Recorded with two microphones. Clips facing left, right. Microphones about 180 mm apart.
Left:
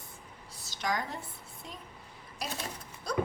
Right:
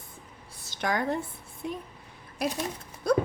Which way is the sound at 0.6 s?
60° right (ahead or behind).